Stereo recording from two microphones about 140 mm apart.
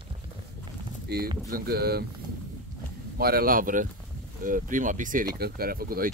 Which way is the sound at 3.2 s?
90° right.